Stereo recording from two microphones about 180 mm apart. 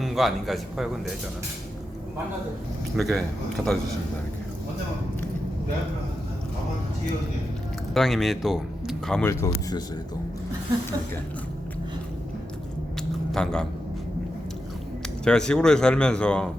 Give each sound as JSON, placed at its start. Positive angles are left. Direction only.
{"t": 0.0, "sound": "speech", "side_deg": 0}
{"t": 3.0, "sound": "speech", "side_deg": 0}
{"t": 7.9, "sound": "speech", "side_deg": 0}
{"t": 9.2, "sound": "speech", "side_deg": 15}
{"t": 13.0, "sound": "a sound", "side_deg": 5}
{"t": 15.2, "sound": "speech", "side_deg": 5}